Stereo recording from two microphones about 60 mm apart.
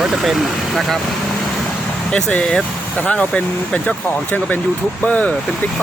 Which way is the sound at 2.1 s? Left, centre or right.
Centre.